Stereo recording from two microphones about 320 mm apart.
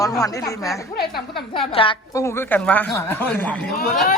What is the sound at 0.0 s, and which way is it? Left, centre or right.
A woman's voice, centre.